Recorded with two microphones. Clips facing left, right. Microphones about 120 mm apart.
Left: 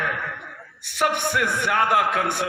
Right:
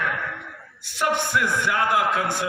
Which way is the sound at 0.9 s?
60° left (ahead or behind).